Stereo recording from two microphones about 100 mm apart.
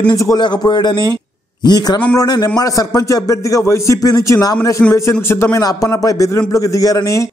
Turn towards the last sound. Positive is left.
turn(degrees=35)  # may be behind; listen again after turning